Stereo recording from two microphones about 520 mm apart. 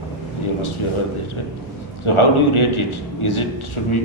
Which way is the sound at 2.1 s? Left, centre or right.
Left.